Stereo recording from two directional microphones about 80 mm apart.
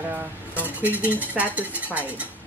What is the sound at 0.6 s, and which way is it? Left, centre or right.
Speech, right.